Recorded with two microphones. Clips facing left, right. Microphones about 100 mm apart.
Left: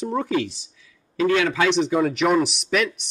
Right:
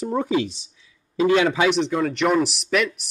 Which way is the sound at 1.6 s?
5° right (ahead or behind).